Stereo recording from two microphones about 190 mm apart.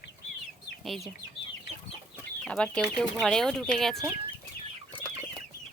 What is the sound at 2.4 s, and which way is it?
Speech, 5° left (ahead or behind).